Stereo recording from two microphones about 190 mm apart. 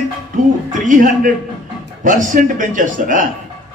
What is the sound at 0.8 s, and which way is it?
A man's voice, 45° right (ahead or behind).